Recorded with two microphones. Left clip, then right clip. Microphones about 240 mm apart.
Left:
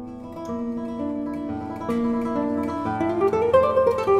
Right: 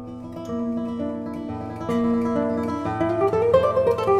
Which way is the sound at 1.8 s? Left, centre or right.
Left.